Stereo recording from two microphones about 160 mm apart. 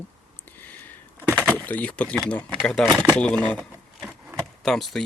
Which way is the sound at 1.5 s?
10° left (ahead or behind).